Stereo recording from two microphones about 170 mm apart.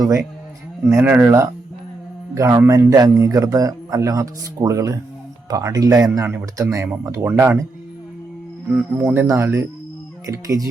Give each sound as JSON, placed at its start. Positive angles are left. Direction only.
{"t": 0.9, "sound": "a man's voice", "side_deg": -15}
{"t": 8.7, "sound": "a man's voice", "side_deg": -15}